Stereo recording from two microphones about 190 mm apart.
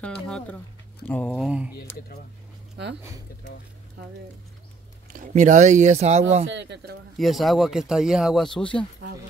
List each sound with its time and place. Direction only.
0.0 s speech: 5° left (ahead or behind)
5.1 s speech: 40° right (ahead or behind)
6.4 s speech: 70° right (ahead or behind)
7.2 s speech: centre (ahead or behind)